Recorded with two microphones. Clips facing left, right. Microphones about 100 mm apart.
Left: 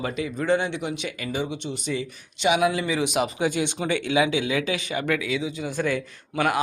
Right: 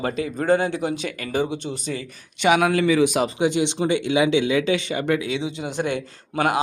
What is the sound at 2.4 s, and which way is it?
Speech, 55° right (ahead or behind).